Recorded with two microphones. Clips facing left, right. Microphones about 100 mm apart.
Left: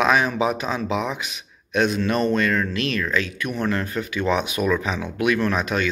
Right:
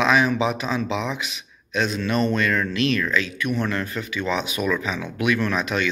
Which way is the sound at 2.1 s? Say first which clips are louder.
Left 1 dB; 45° left (ahead or behind).